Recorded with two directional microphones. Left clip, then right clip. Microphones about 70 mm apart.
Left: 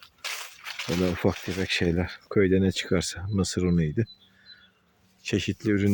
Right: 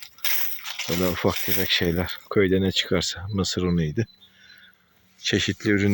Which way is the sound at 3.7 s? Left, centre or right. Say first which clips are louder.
Right 1 dB; left.